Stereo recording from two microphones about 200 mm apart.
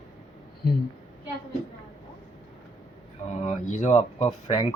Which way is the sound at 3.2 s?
35° left (ahead or behind).